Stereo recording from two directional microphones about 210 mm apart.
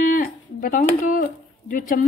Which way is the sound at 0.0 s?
40° left (ahead or behind).